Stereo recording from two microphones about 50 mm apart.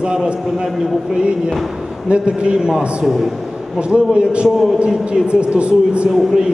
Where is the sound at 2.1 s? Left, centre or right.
Centre.